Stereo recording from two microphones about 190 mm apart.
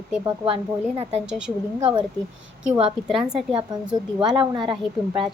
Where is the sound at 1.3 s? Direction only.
5° right (ahead or behind).